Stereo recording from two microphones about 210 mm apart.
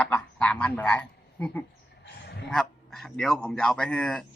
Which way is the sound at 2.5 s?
Centre (ahead or behind).